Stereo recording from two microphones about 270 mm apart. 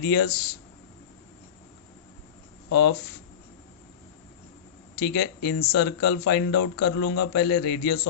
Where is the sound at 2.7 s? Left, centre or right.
Left.